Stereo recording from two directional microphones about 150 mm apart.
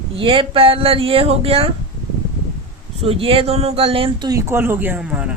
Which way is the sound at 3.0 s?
40° right (ahead or behind).